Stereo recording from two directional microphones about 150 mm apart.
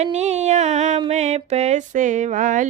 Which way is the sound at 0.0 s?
50° right (ahead or behind).